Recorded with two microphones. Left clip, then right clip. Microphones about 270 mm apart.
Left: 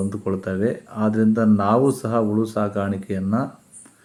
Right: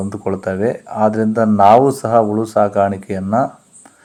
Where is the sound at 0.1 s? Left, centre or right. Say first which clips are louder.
Right 6 dB; centre.